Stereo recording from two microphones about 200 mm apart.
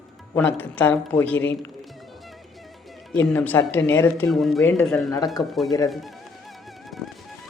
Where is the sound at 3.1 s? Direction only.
5° left (ahead or behind).